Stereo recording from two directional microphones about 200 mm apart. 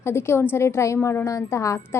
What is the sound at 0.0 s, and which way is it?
A woman's voice, 10° left (ahead or behind).